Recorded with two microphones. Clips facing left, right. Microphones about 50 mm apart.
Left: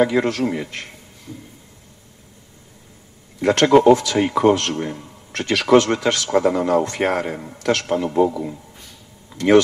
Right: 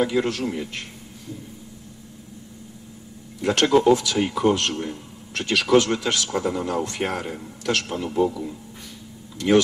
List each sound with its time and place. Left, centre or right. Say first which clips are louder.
0.0 s a man's voice: left 5 dB; left
3.3 s speech: left 5 dB; left